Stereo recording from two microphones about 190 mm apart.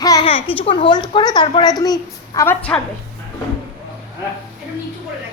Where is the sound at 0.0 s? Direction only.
20° left (ahead or behind).